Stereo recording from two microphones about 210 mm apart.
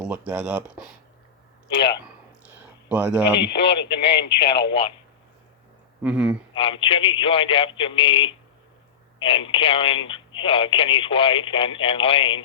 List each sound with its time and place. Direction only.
0.0 s speech: 5° right (ahead or behind)
2.9 s speech: 5° right (ahead or behind)
3.6 s speech: 50° left (ahead or behind)
6.0 s speech: 5° right (ahead or behind)
6.5 s speech: 25° left (ahead or behind)